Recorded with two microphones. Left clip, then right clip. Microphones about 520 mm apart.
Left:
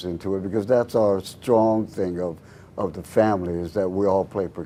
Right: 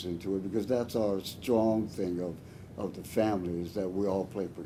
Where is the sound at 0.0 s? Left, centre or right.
Left.